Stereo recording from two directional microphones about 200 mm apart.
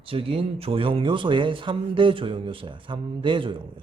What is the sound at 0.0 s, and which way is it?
Speech, 25° right (ahead or behind).